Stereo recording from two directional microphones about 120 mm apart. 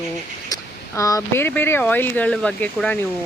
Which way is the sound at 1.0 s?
30° left (ahead or behind).